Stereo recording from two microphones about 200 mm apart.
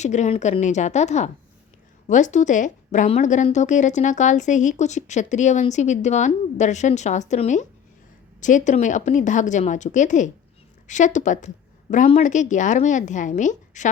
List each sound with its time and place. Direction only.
0.0 s a woman's voice: 35° left (ahead or behind)